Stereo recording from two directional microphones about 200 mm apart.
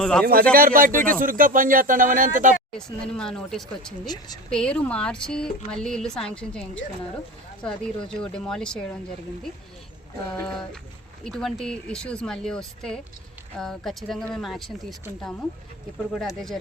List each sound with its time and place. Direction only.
0.0 s speech: 5° left (ahead or behind)
0.5 s speech: 45° right (ahead or behind)
2.7 s speech: 5° left (ahead or behind)
4.0 s a woman's voice: 20° left (ahead or behind)
4.5 s speech: 5° left (ahead or behind)
11.2 s speech: centre (ahead or behind)